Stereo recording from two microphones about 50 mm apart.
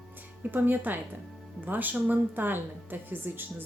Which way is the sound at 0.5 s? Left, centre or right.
Right.